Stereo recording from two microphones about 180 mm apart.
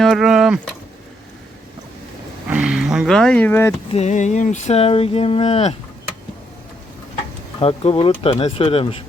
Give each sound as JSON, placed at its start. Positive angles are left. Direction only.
{"t": 0.0, "sound": "speech", "side_deg": 0}
{"t": 2.5, "sound": "speech", "side_deg": -5}
{"t": 3.9, "sound": "speech", "side_deg": 40}
{"t": 7.6, "sound": "speech", "side_deg": 35}